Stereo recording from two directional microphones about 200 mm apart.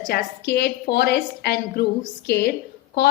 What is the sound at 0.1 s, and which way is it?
A woman's voice, 55° left (ahead or behind).